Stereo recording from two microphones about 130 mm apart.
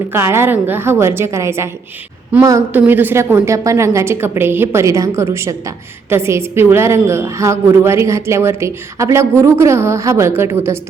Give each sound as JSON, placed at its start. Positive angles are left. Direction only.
{"t": 0.1, "sound": "a woman's voice", "side_deg": -20}
{"t": 2.7, "sound": "a woman's voice", "side_deg": -15}